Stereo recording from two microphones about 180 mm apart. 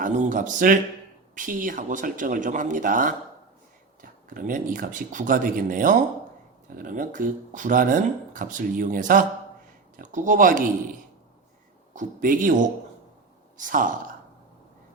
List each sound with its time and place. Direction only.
0.0 s speech: 45° right (ahead or behind)
11.9 s speech: 50° right (ahead or behind)